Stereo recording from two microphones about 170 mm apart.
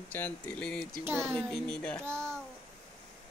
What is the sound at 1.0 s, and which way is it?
Babbling, 15° right (ahead or behind).